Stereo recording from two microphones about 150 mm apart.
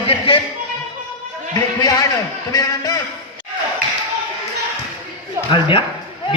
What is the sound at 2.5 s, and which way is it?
Speech, 25° left (ahead or behind).